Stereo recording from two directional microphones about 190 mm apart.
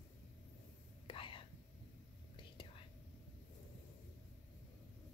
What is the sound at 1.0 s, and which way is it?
Whispering, 25° left (ahead or behind).